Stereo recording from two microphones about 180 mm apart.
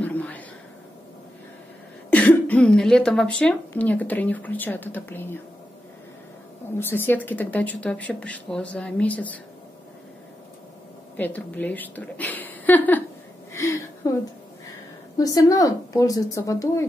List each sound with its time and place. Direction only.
0.0 s a sound: 10° left (ahead or behind)
2.0 s speech: 10° left (ahead or behind)
6.8 s speech: 10° left (ahead or behind)
11.1 s speech: 10° left (ahead or behind)
13.5 s a sound: 15° left (ahead or behind)
15.1 s speech: 20° left (ahead or behind)